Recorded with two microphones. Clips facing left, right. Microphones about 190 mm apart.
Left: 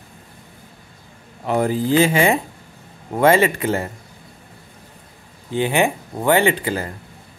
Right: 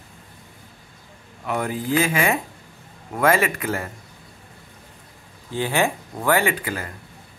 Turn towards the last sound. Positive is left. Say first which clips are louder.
# left 5 dB
turn(degrees=30)  # may be behind; listen again after turning